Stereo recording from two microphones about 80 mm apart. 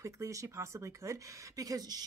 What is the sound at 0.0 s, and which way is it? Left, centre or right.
Speech, right.